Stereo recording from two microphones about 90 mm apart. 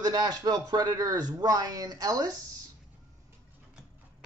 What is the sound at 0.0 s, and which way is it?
Speech, 45° right (ahead or behind).